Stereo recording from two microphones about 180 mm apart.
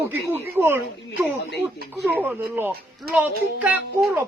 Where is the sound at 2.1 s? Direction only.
10° right (ahead or behind).